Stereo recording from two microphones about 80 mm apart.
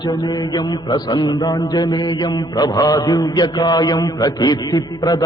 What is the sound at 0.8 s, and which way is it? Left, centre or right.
A man's voice, left.